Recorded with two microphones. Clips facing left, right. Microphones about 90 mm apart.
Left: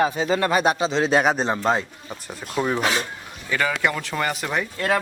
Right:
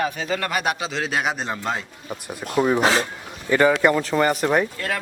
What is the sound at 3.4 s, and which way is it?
Speech, 30° right (ahead or behind).